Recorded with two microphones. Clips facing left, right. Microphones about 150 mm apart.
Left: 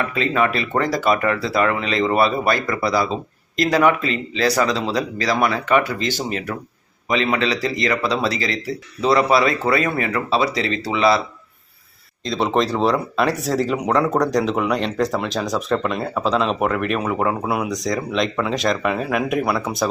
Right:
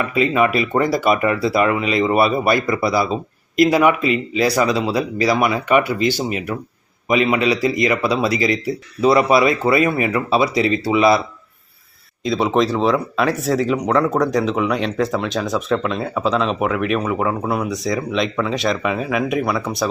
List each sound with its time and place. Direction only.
0.1 s speech: 10° right (ahead or behind)
12.2 s speech: 5° right (ahead or behind)